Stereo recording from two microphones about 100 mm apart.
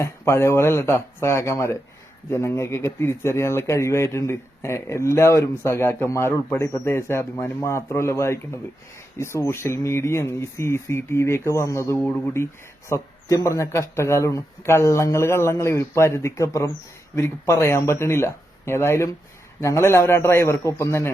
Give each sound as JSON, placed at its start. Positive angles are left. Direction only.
{"t": 0.0, "sound": "speech", "side_deg": 30}
{"t": 11.9, "sound": "speech", "side_deg": 20}
{"t": 12.9, "sound": "speech", "side_deg": 35}